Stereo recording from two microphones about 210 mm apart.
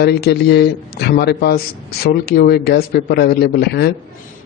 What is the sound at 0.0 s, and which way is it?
Speech, 50° left (ahead or behind).